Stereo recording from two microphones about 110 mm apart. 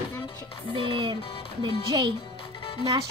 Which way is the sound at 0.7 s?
50° right (ahead or behind).